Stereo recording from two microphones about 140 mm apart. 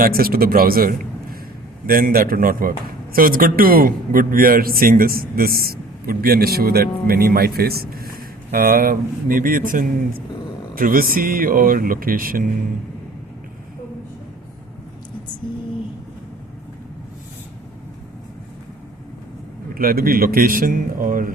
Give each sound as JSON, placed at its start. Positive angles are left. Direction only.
{"t": 0.0, "sound": "a man's voice", "side_deg": -90}
{"t": 10.8, "sound": "speech", "side_deg": -90}
{"t": 19.7, "sound": "speech", "side_deg": -90}